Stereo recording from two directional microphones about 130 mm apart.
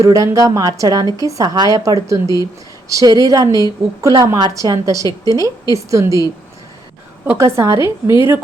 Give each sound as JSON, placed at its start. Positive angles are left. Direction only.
{"t": 0.0, "sound": "a woman's voice", "side_deg": -25}
{"t": 7.3, "sound": "a woman's voice", "side_deg": -20}